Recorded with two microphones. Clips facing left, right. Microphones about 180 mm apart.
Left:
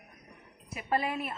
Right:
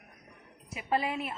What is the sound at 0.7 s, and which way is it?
Speech, 15° right (ahead or behind).